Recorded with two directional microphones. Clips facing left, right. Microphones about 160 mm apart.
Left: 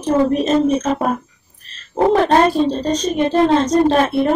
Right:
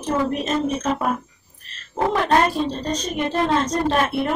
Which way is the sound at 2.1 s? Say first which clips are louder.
Left 4 dB; 30° left (ahead or behind).